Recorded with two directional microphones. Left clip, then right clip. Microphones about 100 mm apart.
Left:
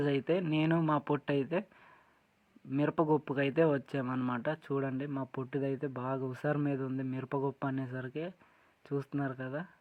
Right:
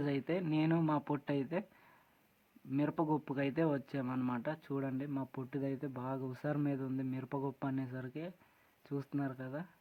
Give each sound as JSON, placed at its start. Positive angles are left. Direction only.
{"t": 0.0, "sound": "speech", "side_deg": 25}
{"t": 2.7, "sound": "speech", "side_deg": 25}